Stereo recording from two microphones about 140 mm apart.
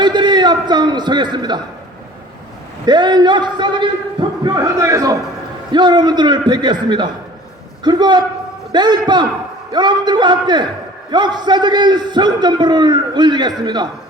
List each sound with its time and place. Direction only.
0.0 s a man's voice: 30° right (ahead or behind)
2.8 s a man's voice: 30° right (ahead or behind)